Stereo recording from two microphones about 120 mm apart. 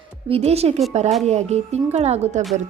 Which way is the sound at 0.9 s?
70° right (ahead or behind).